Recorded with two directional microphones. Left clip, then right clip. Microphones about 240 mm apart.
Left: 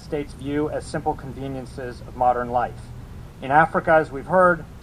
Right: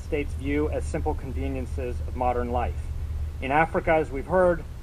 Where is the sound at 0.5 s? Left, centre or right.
Right.